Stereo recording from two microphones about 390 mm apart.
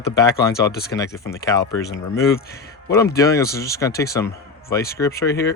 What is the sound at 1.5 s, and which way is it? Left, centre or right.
Speech, centre.